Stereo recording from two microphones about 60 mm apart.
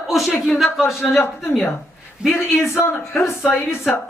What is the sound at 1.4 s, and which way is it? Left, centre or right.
Speech, centre.